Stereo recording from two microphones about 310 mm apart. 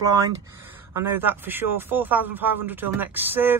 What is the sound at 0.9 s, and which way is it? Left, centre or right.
Speech, centre.